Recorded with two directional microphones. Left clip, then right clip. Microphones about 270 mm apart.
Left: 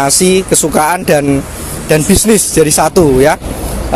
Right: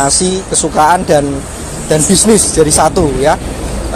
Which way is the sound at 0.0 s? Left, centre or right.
Left.